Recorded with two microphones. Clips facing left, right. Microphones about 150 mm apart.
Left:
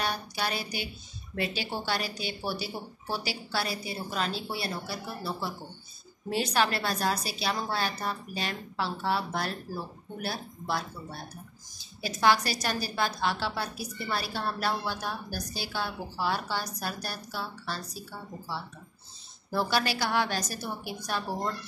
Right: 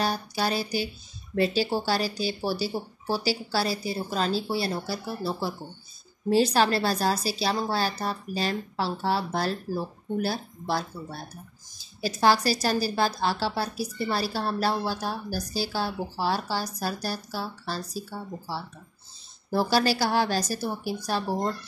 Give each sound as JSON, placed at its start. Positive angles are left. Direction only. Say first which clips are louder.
{"t": 0.0, "sound": "a woman's voice", "louder": "right 5 dB", "side_deg": -35}
{"t": 11.8, "sound": "a woman's voice", "louder": "right 3 dB", "side_deg": -35}
{"t": 19.5, "sound": "a woman's voice", "louder": "right 5 dB", "side_deg": -35}